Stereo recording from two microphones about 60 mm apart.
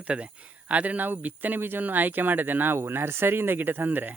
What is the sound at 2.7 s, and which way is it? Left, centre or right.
Speech, right.